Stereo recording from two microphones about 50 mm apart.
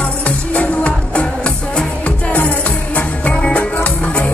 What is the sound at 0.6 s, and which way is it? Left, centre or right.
Music, left.